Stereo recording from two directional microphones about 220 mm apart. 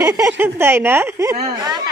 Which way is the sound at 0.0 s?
15° right (ahead or behind).